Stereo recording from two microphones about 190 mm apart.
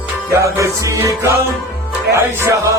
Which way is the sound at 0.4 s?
15° right (ahead or behind).